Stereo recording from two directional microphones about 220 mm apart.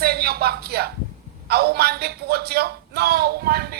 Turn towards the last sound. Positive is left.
turn(degrees=-45)  # may be behind; listen again after turning